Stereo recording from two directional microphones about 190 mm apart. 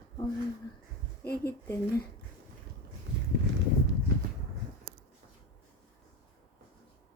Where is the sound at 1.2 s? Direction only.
55° left (ahead or behind).